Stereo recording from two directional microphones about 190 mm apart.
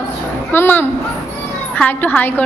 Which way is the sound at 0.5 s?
10° left (ahead or behind).